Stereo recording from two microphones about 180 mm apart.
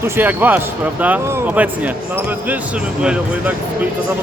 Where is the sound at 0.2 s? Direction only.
10° right (ahead or behind).